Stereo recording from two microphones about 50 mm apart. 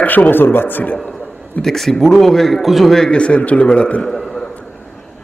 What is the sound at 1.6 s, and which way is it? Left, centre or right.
Speech, centre.